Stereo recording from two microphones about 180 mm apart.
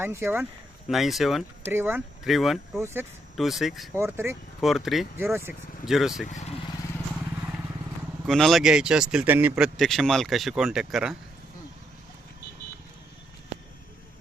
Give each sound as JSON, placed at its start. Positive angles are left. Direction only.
{"t": 0.0, "sound": "speech", "side_deg": -15}
{"t": 0.9, "sound": "speech", "side_deg": 0}
{"t": 1.6, "sound": "speech", "side_deg": -10}
{"t": 2.2, "sound": "speech", "side_deg": 0}
{"t": 2.8, "sound": "speech", "side_deg": -10}
{"t": 3.3, "sound": "speech", "side_deg": 0}
{"t": 3.9, "sound": "speech", "side_deg": -15}
{"t": 4.6, "sound": "speech", "side_deg": 0}
{"t": 5.1, "sound": "speech", "side_deg": -15}
{"t": 5.8, "sound": "speech", "side_deg": 0}
{"t": 6.2, "sound": "speech", "side_deg": 40}
{"t": 8.3, "sound": "speech", "side_deg": 0}